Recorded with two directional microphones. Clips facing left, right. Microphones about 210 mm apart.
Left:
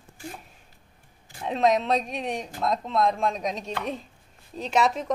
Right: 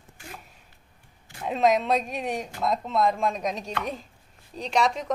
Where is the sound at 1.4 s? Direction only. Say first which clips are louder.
Even; centre (ahead or behind).